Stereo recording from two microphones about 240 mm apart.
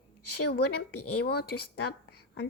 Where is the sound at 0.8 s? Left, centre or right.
Left.